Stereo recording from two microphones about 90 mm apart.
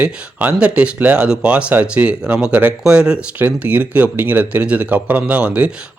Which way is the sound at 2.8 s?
10° right (ahead or behind).